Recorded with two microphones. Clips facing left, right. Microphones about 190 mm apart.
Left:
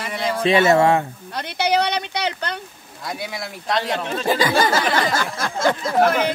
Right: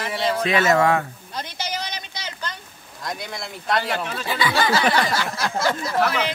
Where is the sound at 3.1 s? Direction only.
5° left (ahead or behind).